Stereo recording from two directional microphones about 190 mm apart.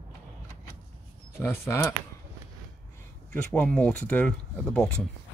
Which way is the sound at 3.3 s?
5° left (ahead or behind).